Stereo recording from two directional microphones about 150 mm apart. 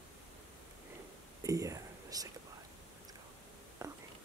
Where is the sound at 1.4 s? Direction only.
20° right (ahead or behind).